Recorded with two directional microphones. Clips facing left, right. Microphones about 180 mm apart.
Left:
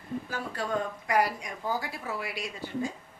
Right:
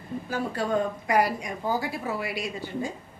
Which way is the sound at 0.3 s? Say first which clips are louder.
Right 8 dB; 15° right (ahead or behind).